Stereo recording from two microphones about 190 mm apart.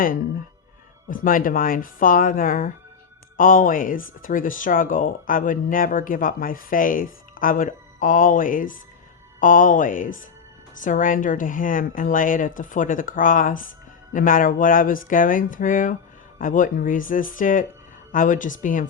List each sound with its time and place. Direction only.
1.1 s speech: 45° left (ahead or behind)